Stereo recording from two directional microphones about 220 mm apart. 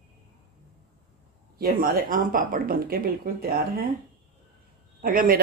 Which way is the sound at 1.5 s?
45° right (ahead or behind).